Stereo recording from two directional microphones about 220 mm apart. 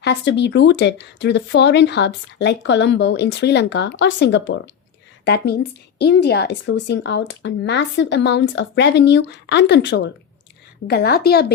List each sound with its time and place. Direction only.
0.0 s speech: 50° left (ahead or behind)